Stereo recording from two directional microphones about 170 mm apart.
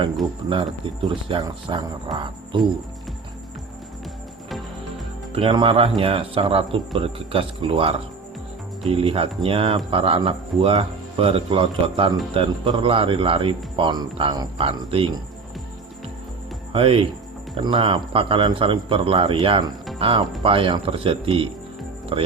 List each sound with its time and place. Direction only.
0.5 s speech: 30° right (ahead or behind)
2.1 s music: 30° right (ahead or behind)
4.4 s music: centre (ahead or behind)
5.3 s speech: 30° right (ahead or behind)
16.7 s speech: 30° right (ahead or behind)